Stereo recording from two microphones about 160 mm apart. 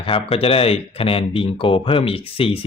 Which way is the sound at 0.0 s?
35° left (ahead or behind).